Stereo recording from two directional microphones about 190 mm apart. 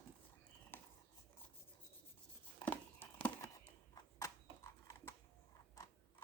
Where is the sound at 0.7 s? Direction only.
10° left (ahead or behind).